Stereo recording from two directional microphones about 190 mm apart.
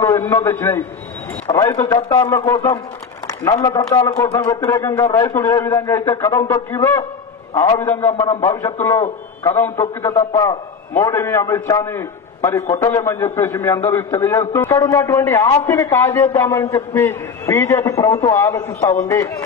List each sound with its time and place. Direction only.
0.0 s a man's voice: 15° left (ahead or behind)